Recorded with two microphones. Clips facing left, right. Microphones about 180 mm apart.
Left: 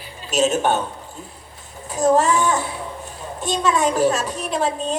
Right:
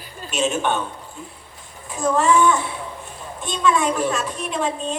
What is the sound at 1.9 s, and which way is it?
A woman's voice, 40° left (ahead or behind).